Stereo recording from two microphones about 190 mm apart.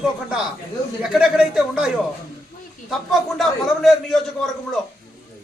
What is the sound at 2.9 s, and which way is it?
A man's voice, centre (ahead or behind).